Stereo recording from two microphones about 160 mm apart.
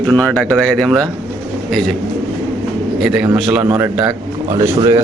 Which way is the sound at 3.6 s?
20° right (ahead or behind).